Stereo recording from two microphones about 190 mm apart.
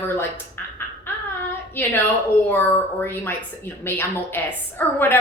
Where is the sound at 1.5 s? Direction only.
10° left (ahead or behind).